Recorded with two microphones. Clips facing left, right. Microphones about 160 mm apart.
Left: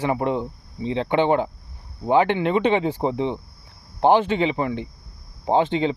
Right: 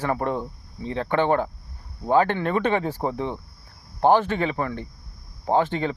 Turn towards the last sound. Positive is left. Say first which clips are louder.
# left 2 dB
turn(degrees=20)  # may be behind; listen again after turning